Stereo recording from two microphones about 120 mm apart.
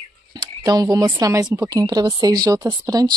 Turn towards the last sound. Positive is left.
turn(degrees=-25)  # may be behind; listen again after turning